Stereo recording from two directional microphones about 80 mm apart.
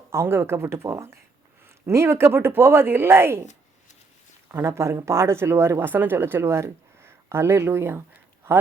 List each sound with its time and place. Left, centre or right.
0.1 s speech: right
4.4 s speech: right